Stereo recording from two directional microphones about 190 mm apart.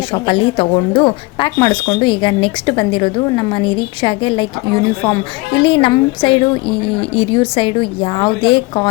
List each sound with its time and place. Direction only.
0.1 s speech: 25° left (ahead or behind)